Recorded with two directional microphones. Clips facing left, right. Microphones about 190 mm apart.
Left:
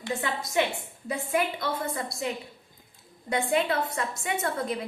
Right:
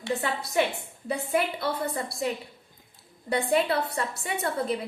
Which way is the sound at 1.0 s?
30° right (ahead or behind).